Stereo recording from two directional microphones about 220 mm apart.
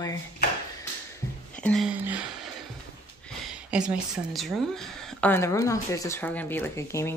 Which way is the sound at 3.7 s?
5° right (ahead or behind).